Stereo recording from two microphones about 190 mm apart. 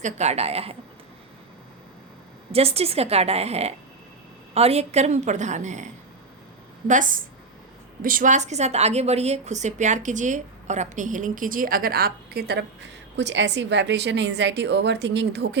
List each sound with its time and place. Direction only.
0.0 s a woman's voice: 35° right (ahead or behind)
2.5 s a woman's voice: 30° right (ahead or behind); by 15.4 s 65° right (ahead or behind)